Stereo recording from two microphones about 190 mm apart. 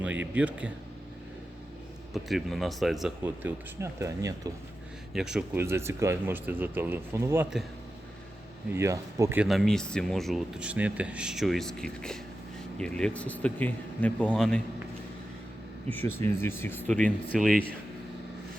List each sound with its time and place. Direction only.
0.0 s speech: 10° right (ahead or behind)
2.1 s speech: centre (ahead or behind)
3.2 s speech: 10° right (ahead or behind)
5.1 s speech: 5° right (ahead or behind)
8.7 s speech: 15° right (ahead or behind)
9.5 s speech: centre (ahead or behind)
16.2 s speech: 10° left (ahead or behind)